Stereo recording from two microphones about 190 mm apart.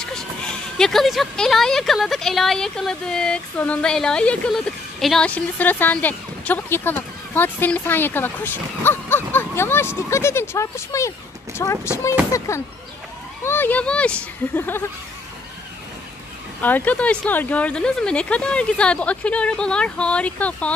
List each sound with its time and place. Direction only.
0.0 s speech: 5° left (ahead or behind)
16.6 s speech: 10° left (ahead or behind)